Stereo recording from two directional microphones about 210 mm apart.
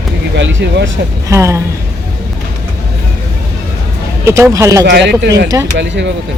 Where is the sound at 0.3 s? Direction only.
60° right (ahead or behind).